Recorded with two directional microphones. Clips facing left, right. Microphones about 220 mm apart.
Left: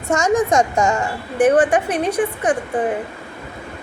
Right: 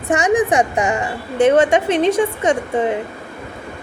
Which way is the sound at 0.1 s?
15° right (ahead or behind).